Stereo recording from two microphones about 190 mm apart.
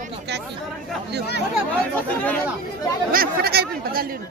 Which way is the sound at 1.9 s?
10° left (ahead or behind).